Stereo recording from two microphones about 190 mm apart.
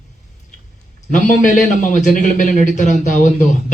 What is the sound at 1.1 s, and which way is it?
A man's voice, 45° left (ahead or behind).